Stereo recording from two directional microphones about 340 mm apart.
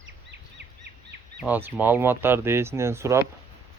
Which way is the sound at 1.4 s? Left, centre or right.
Centre.